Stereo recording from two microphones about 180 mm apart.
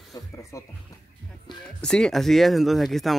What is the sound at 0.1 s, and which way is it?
Speech, 15° left (ahead or behind).